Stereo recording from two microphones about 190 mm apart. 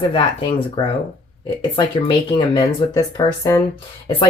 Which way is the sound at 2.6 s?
20° left (ahead or behind).